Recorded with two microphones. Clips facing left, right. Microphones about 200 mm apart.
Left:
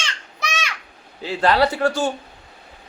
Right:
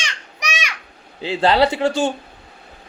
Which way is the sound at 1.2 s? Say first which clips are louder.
Right 2 dB; 25° right (ahead or behind).